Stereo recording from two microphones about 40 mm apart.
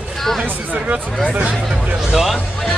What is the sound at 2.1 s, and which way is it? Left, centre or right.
Speech, centre.